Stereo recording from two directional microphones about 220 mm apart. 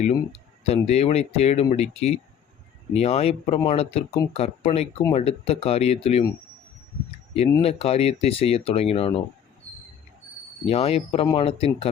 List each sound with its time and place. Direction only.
0.0 s speech: 30° left (ahead or behind)
7.6 s speech: 25° left (ahead or behind)
10.7 s speech: 25° left (ahead or behind)